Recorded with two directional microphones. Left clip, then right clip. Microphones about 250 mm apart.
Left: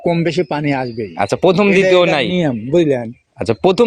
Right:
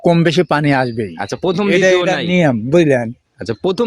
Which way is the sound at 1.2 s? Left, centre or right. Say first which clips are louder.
Left 7 dB; centre.